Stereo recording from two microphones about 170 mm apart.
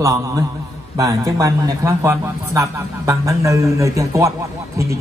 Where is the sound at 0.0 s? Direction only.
20° right (ahead or behind).